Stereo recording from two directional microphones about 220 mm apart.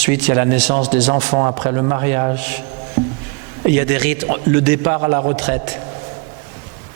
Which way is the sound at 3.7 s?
15° right (ahead or behind).